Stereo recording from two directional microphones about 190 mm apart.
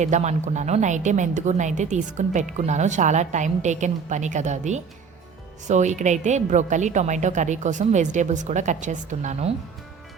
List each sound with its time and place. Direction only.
0.0 s a woman's voice: 40° right (ahead or behind)